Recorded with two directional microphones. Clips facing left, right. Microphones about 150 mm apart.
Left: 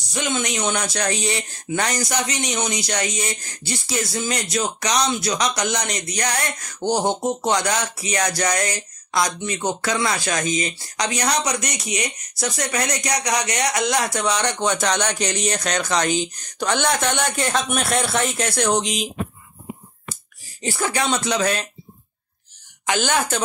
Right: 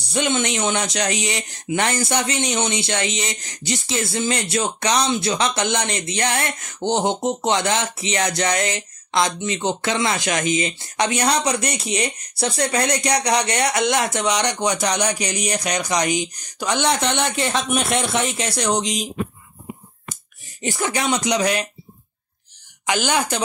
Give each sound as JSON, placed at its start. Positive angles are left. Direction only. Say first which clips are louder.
{"t": 0.1, "sound": "speech", "louder": "right 3 dB", "side_deg": -25}
{"t": 17.4, "sound": "speech", "louder": "right 1 dB", "side_deg": 0}
{"t": 20.6, "sound": "speech", "louder": "even", "side_deg": -20}
{"t": 22.8, "sound": "speech", "louder": "even", "side_deg": -15}